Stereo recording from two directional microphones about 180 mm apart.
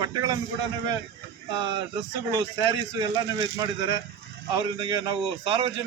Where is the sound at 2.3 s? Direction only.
20° right (ahead or behind).